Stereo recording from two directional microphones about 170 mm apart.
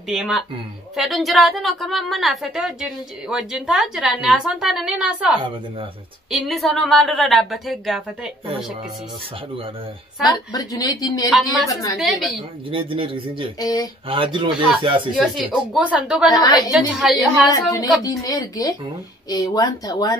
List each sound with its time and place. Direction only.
0.1 s a woman's voice: 5° right (ahead or behind)
6.3 s a woman's voice: centre (ahead or behind)
10.5 s speech: 20° left (ahead or behind)
11.2 s a woman's voice: centre (ahead or behind)
12.7 s a man's voice: 30° right (ahead or behind)
13.6 s speech: 20° left (ahead or behind)
14.0 s a man's voice: 30° right (ahead or behind)
15.5 s a woman's voice: 5° right (ahead or behind)
16.3 s speech: 20° left (ahead or behind)
16.7 s a woman's voice: 5° right (ahead or behind)
17.5 s speech: 20° left (ahead or behind)